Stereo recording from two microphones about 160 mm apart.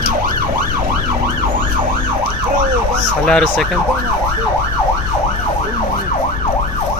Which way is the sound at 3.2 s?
5° left (ahead or behind).